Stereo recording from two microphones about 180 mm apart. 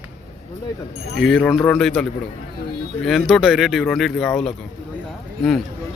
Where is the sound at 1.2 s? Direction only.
Centre (ahead or behind).